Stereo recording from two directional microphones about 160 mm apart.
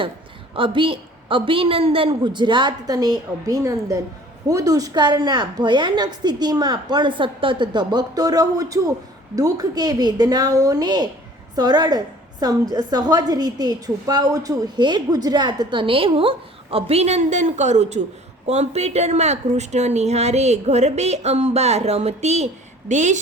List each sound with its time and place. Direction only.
0.5 s a woman's voice: 35° right (ahead or behind); by 23.2 s 50° right (ahead or behind)